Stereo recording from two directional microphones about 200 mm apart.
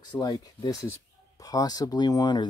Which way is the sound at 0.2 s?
20° left (ahead or behind).